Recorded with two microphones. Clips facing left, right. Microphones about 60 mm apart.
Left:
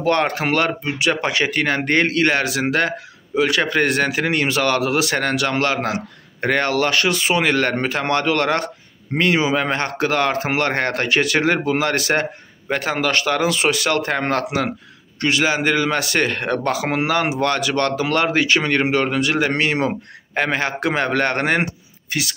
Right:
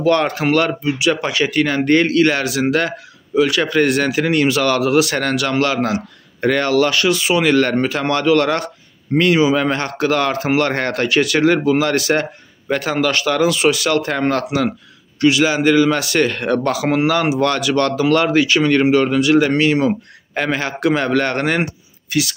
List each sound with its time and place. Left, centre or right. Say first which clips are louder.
0.0 s speech: right 3 dB; left
0.9 s speech: right 2 dB; left
9.1 s speech: right 4 dB; left